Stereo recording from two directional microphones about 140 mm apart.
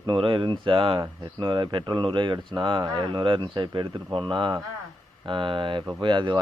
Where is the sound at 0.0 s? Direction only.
35° right (ahead or behind).